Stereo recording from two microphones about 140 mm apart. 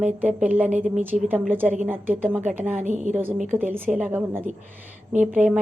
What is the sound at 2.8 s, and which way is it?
Speech, 60° right (ahead or behind).